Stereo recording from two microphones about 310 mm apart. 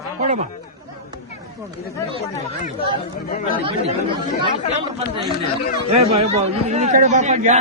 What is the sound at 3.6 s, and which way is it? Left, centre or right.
Speech, centre.